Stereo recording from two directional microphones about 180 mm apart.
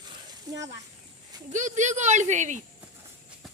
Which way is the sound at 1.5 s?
40° right (ahead or behind).